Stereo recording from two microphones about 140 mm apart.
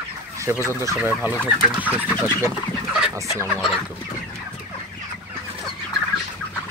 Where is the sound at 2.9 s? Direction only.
5° right (ahead or behind).